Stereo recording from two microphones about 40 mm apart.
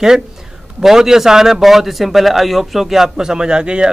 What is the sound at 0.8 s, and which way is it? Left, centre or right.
A man's voice, centre.